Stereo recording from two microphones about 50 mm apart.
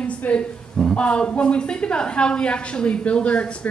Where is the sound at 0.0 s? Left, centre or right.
Left.